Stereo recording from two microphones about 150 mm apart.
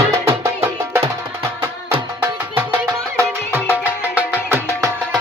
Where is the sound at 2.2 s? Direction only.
15° right (ahead or behind).